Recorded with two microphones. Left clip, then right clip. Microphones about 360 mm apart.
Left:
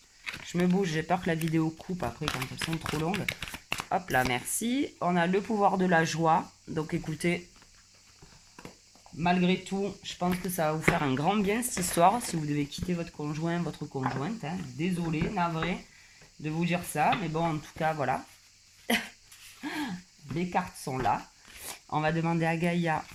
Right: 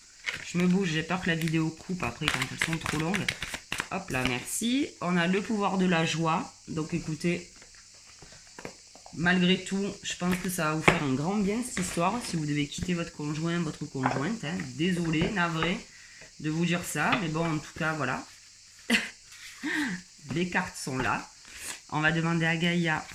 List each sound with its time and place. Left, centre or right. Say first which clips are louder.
0.3 s speech: right 1 dB; centre
3.8 s speech: left 6 dB; left
9.2 s speech: right 2 dB; centre
11.2 s speech: left 3 dB; left
20.3 s speech: right 1 dB; centre